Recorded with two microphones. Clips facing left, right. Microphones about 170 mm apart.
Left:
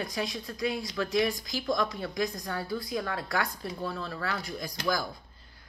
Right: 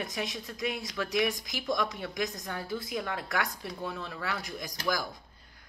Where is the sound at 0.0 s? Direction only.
20° right (ahead or behind).